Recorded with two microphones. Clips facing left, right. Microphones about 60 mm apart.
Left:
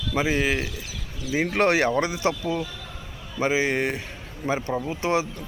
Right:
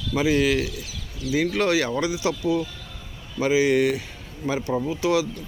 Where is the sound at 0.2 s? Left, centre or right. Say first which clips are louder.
Right 3 dB; left.